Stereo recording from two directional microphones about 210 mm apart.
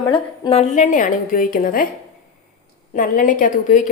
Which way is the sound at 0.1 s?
25° left (ahead or behind).